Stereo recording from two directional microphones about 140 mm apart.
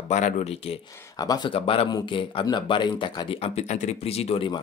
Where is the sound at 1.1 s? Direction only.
30° left (ahead or behind).